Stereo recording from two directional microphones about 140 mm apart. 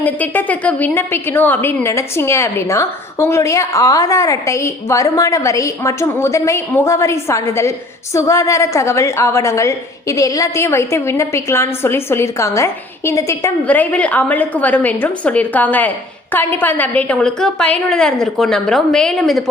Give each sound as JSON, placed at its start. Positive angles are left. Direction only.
{"t": 0.0, "sound": "a woman's voice", "side_deg": 10}